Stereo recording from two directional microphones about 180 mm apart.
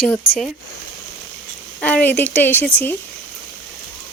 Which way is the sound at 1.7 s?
10° left (ahead or behind).